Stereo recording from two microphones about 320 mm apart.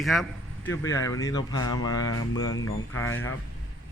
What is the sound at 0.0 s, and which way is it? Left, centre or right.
Speech, centre.